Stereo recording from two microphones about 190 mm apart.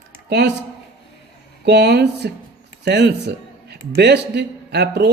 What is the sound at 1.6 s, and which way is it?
Speech, 60° right (ahead or behind).